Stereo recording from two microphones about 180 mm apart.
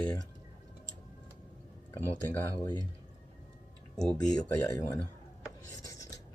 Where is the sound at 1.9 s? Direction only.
10° left (ahead or behind).